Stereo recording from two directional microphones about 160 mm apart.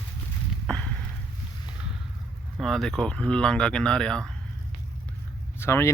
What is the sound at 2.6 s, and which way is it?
Speech, centre (ahead or behind).